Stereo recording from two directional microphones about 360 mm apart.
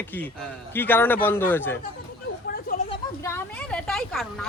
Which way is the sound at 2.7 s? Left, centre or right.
Left.